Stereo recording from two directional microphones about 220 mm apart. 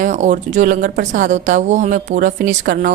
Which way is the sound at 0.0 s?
35° right (ahead or behind).